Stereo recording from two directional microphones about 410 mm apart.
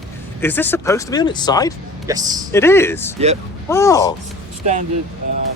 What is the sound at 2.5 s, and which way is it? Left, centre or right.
Speech, centre.